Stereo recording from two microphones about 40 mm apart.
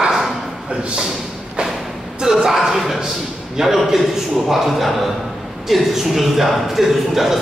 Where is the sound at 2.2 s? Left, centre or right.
Centre.